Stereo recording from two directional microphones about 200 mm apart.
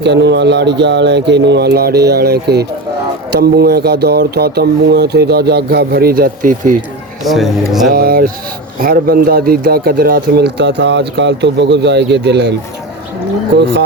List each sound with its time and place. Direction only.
0.0 s speech: 60° right (ahead or behind); by 6.7 s 40° right (ahead or behind)
7.3 s speech: centre (ahead or behind)
7.9 s speech: 45° right (ahead or behind)